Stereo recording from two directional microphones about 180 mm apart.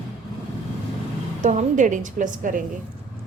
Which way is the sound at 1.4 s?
45° right (ahead or behind).